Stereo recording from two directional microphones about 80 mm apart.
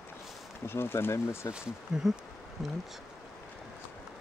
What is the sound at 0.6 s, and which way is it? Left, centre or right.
Speech, left.